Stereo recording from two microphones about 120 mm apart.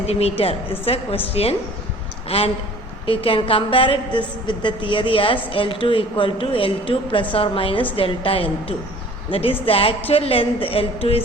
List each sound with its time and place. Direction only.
0.0 s a woman's voice: 60° left (ahead or behind)